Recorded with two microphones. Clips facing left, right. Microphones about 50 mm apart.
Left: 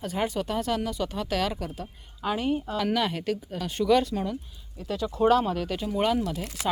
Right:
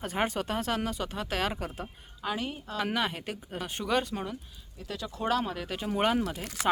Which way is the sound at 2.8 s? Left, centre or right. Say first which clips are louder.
Left 4 dB; right.